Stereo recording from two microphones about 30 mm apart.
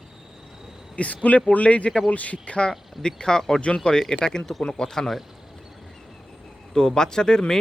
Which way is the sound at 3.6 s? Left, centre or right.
Left.